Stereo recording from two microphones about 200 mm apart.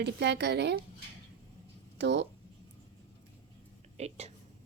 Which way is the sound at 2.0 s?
60° right (ahead or behind).